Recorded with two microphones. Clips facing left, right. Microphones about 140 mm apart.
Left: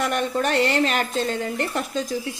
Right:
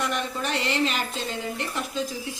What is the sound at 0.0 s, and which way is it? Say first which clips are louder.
A woman's voice: left 6 dB; 50° left (ahead or behind).